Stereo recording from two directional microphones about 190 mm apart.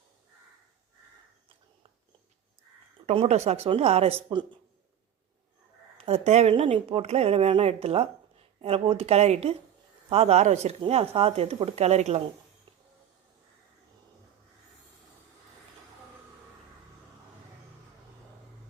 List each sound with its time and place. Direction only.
3.1 s speech: 35° right (ahead or behind)
6.1 s speech: 35° right (ahead or behind)